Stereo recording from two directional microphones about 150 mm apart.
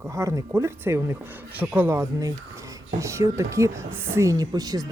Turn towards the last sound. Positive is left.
turn(degrees=-25)  # may be behind; listen again after turning